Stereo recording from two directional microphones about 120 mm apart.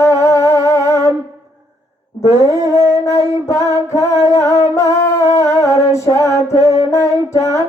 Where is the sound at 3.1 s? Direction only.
25° left (ahead or behind).